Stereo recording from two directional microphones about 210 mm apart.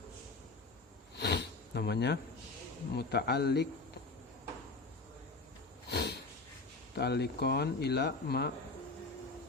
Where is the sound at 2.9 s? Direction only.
50° left (ahead or behind).